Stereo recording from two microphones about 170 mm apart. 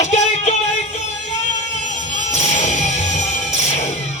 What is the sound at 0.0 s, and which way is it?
Music, 40° left (ahead or behind).